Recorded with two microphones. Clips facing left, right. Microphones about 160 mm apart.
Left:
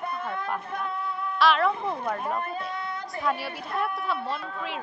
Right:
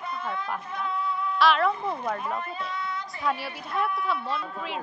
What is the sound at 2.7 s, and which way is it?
Child singing, 55° left (ahead or behind).